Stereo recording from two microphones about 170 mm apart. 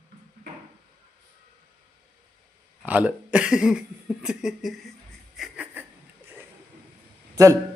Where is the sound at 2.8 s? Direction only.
10° right (ahead or behind).